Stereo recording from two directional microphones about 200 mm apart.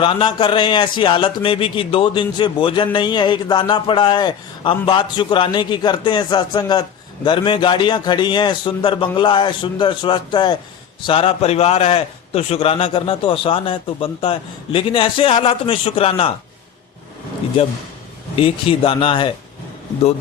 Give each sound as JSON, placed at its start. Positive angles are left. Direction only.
{"t": 0.0, "sound": "a man's voice", "side_deg": 25}
{"t": 18.3, "sound": "a man's voice", "side_deg": 25}